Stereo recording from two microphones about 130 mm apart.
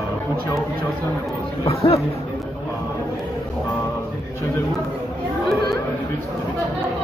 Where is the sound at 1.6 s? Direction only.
50° left (ahead or behind).